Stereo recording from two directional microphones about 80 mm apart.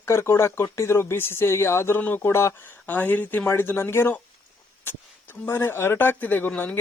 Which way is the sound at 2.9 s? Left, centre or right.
Left.